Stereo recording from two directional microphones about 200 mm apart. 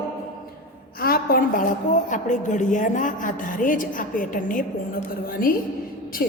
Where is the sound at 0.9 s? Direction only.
50° left (ahead or behind).